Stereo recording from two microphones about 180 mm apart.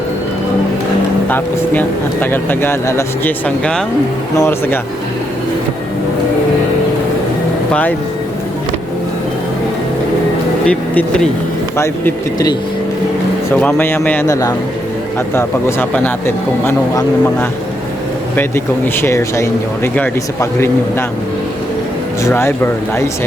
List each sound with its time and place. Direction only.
1.3 s speech: 10° left (ahead or behind)
7.7 s speech: 10° left (ahead or behind)
10.7 s speech: 5° left (ahead or behind)
11.8 s speech: 20° left (ahead or behind)
18.3 s speech: 15° left (ahead or behind)
22.2 s speech: 15° left (ahead or behind)